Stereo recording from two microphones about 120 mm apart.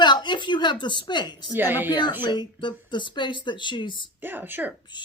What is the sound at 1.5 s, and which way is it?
Speech, 15° right (ahead or behind).